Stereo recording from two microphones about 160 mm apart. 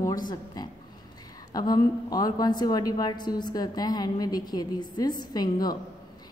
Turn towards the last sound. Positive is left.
turn(degrees=25)  # may be behind; listen again after turning